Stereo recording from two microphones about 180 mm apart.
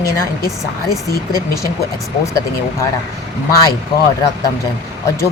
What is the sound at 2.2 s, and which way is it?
Speech, 15° left (ahead or behind).